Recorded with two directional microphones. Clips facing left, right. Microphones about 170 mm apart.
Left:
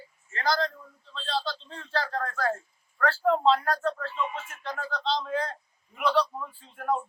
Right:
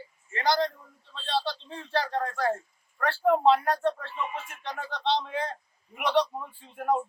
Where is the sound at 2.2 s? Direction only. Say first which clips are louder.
Right 1 dB; 20° right (ahead or behind).